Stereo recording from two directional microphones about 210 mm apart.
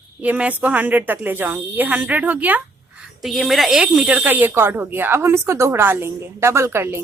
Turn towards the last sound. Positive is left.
turn(degrees=-10)  # may be behind; listen again after turning